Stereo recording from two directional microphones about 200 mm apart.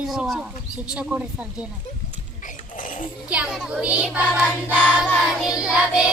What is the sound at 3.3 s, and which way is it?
Child singing, 5° right (ahead or behind).